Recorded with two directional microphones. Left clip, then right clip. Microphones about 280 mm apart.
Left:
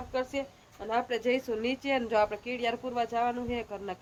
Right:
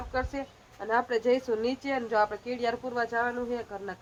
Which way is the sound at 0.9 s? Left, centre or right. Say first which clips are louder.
Right 3 dB; centre.